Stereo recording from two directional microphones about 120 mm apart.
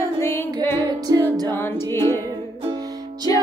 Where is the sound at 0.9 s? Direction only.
30° right (ahead or behind).